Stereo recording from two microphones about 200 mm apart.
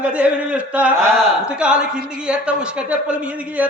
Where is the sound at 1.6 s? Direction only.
5° right (ahead or behind).